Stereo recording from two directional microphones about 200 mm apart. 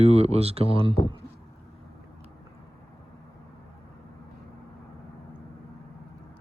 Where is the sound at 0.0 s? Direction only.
30° right (ahead or behind).